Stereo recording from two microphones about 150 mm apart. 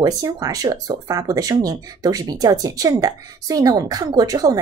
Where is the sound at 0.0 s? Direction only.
25° right (ahead or behind).